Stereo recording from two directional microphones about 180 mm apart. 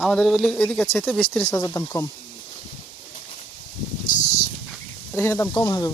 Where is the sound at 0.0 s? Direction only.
5° left (ahead or behind).